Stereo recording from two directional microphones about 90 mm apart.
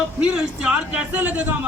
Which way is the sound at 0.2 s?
15° right (ahead or behind).